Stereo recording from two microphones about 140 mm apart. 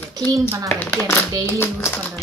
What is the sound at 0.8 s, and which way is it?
Speech, 15° left (ahead or behind).